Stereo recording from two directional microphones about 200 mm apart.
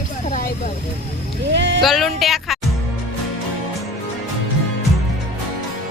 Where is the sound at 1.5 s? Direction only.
60° right (ahead or behind).